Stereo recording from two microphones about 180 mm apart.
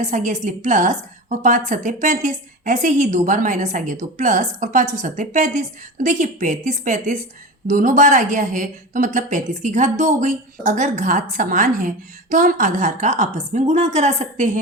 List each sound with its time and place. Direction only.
0.0 s a woman's voice: 45° right (ahead or behind)